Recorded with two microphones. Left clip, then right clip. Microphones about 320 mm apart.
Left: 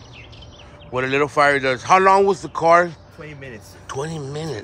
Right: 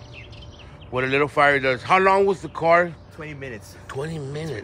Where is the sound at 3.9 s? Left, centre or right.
Centre.